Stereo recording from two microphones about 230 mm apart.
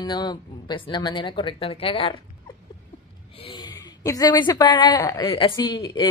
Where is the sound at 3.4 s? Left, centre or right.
Centre.